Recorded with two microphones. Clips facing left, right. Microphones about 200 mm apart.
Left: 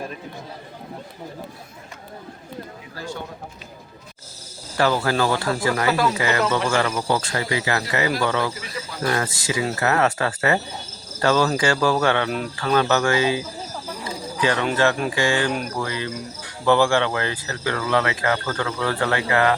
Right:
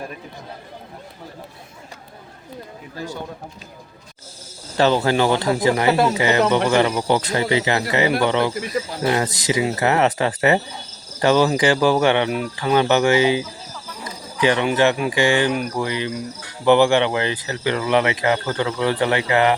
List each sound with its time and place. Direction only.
4.8 s speech: 25° right (ahead or behind)
11.2 s cricket: 15° right (ahead or behind)
14.4 s speech: 20° right (ahead or behind)
15.1 s cricket: 20° right (ahead or behind)
15.8 s speech: 20° right (ahead or behind)